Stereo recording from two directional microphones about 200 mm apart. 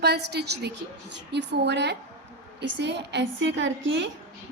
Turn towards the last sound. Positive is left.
turn(degrees=-65)  # may be behind; listen again after turning